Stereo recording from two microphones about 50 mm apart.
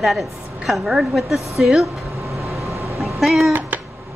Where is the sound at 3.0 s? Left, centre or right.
Centre.